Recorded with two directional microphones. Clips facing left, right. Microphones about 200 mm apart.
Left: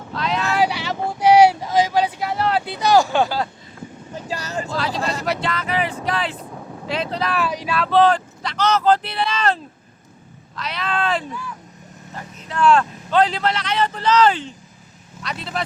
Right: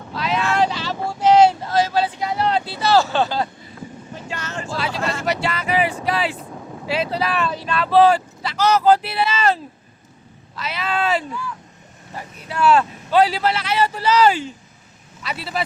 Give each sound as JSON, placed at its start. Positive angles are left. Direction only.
{"t": 0.1, "sound": "vehicle", "side_deg": -5}
{"t": 0.5, "sound": "vehicle", "side_deg": 10}
{"t": 2.6, "sound": "speech", "side_deg": 15}
{"t": 4.3, "sound": "speech", "side_deg": 35}
{"t": 5.2, "sound": "speech", "side_deg": -5}
{"t": 7.4, "sound": "speech", "side_deg": 10}
{"t": 7.8, "sound": "speech", "side_deg": -5}